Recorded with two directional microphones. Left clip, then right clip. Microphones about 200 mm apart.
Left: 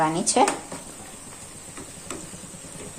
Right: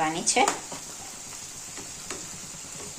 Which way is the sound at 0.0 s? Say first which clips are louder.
Left 3 dB; 10° left (ahead or behind).